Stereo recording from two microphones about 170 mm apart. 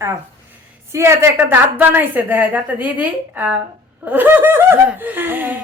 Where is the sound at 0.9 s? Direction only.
15° right (ahead or behind).